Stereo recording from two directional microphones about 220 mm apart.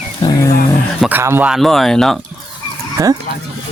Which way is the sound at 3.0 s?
15° right (ahead or behind).